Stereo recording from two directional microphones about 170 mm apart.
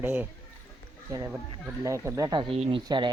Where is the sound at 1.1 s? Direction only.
20° right (ahead or behind).